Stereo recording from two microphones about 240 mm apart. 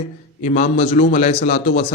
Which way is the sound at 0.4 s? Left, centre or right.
Left.